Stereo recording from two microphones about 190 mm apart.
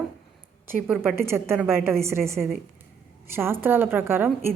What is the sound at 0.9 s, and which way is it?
A woman's voice, 10° right (ahead or behind).